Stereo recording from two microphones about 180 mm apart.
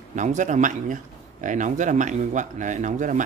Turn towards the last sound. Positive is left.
turn(degrees=-45)  # may be behind; listen again after turning